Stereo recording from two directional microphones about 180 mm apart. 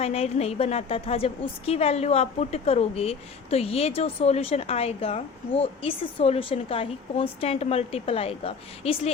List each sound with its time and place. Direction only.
0.0 s a woman's voice: 35° left (ahead or behind)